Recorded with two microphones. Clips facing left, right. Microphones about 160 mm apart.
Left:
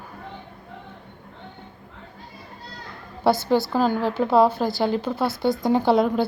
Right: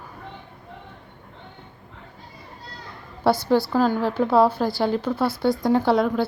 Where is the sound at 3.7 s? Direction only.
20° left (ahead or behind).